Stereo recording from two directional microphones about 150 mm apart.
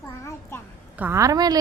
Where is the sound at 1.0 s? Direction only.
20° right (ahead or behind).